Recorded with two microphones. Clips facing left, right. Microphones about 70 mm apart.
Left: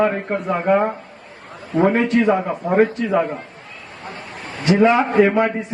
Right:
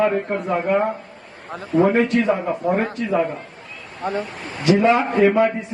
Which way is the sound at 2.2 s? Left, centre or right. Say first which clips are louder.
Left 2 dB; left.